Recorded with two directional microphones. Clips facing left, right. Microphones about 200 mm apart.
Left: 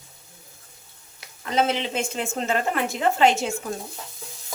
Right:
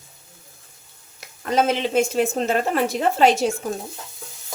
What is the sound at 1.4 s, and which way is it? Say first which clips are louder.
A woman's voice: right 3 dB; 45° right (ahead or behind).